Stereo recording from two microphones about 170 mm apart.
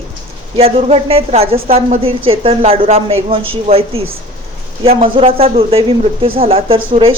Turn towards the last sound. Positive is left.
turn(degrees=-30)  # may be behind; listen again after turning